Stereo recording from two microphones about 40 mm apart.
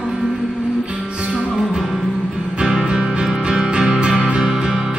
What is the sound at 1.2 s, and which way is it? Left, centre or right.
Music, centre.